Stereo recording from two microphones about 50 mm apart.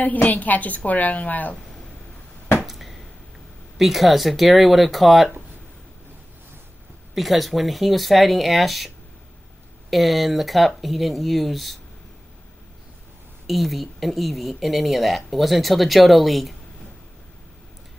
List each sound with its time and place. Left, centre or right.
0.0 s a woman's voice: left
2.6 s a sound: centre
3.7 s speech: centre
7.2 s speech: centre
13.5 s speech: centre